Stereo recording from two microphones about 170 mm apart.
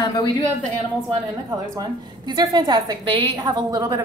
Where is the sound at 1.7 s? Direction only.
25° right (ahead or behind).